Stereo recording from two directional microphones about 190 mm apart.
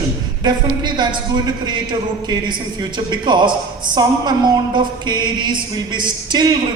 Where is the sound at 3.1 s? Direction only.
25° right (ahead or behind).